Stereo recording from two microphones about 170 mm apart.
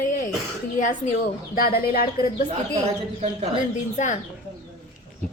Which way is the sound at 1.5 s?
60° left (ahead or behind).